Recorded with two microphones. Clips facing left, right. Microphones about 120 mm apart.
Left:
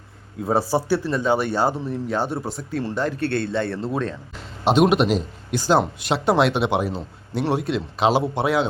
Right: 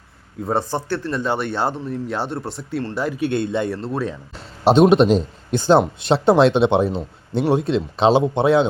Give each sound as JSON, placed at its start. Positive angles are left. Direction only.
{"t": 0.4, "sound": "a man's voice", "side_deg": 5}
{"t": 3.8, "sound": "speech", "side_deg": 0}
{"t": 4.6, "sound": "speech", "side_deg": -30}